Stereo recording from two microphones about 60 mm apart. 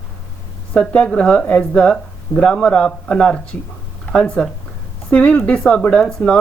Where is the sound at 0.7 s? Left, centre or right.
Centre.